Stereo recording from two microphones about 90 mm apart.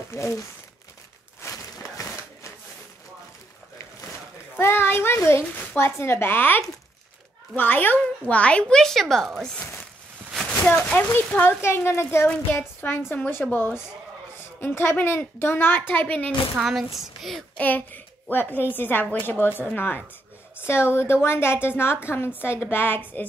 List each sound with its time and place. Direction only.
0.1 s speech: 30° left (ahead or behind)
1.4 s a sound: 35° left (ahead or behind)
4.6 s a child's voice: 25° left (ahead or behind); by 9.5 s 5° left (ahead or behind)
10.6 s a child's voice: 15° left (ahead or behind)
16.5 s speech: centre (ahead or behind)
17.6 s a child's voice: 20° left (ahead or behind)